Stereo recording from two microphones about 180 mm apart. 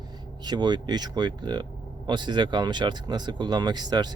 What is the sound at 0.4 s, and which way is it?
Speech, 25° right (ahead or behind).